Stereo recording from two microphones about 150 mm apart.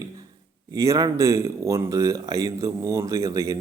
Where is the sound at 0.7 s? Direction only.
20° right (ahead or behind).